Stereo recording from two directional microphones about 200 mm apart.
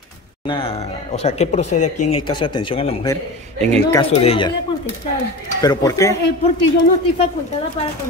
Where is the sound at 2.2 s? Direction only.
25° left (ahead or behind).